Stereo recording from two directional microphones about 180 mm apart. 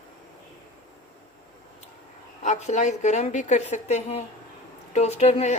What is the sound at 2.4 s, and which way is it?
A woman's voice, 40° left (ahead or behind).